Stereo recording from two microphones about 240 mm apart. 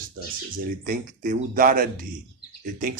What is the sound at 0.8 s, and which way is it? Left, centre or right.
Speech, right.